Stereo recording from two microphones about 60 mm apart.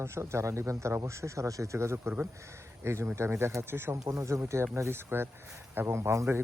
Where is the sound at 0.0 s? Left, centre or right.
Right.